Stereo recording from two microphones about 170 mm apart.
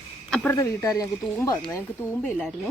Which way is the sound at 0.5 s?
20° left (ahead or behind).